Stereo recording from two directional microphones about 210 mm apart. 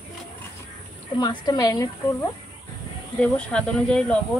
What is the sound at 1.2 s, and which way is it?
Speech, 20° left (ahead or behind).